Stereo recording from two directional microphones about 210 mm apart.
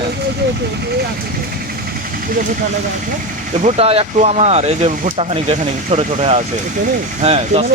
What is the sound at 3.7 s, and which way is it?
Speech, 30° right (ahead or behind).